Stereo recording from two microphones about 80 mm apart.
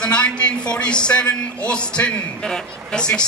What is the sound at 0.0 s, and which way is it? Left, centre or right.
A man's voice, centre.